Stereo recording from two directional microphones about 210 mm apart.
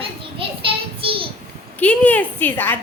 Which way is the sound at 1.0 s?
25° right (ahead or behind).